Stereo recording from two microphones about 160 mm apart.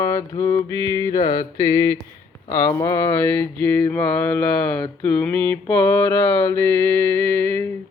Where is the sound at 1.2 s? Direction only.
30° left (ahead or behind).